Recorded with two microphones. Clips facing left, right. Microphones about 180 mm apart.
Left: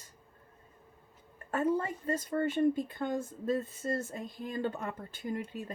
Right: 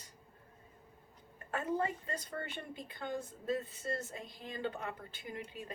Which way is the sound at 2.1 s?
45° left (ahead or behind).